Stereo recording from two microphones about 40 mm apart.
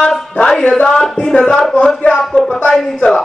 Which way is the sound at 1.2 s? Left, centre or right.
Centre.